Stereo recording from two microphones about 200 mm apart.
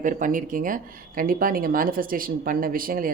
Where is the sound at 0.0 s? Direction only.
40° right (ahead or behind).